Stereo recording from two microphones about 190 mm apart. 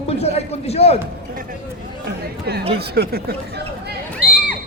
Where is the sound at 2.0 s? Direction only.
55° right (ahead or behind).